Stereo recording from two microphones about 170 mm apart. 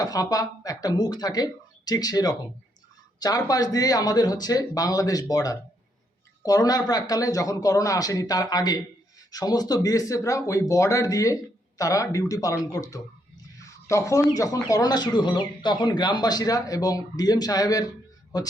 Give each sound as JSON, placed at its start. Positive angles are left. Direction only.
{"t": 0.0, "sound": "speech", "side_deg": 20}
{"t": 13.6, "sound": "turkey", "side_deg": 20}
{"t": 14.3, "sound": "speech", "side_deg": 20}